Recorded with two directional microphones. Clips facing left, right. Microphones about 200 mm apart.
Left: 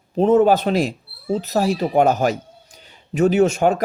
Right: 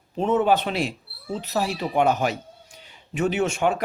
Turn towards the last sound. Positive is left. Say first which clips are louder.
# left 7 dB
turn(degrees=40)  # may be behind; listen again after turning